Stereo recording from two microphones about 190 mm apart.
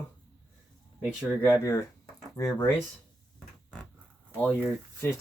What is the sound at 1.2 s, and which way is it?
Speech, 10° left (ahead or behind).